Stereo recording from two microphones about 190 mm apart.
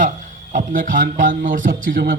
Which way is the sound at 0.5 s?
45° right (ahead or behind).